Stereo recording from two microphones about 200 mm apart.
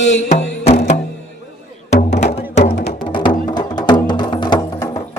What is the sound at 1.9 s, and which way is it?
Music, 35° left (ahead or behind).